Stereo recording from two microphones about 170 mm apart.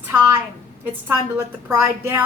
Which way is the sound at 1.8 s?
15° right (ahead or behind).